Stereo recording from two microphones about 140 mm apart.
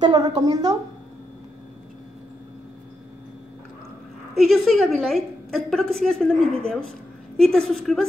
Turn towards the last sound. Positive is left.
turn(degrees=5)  # may be behind; listen again after turning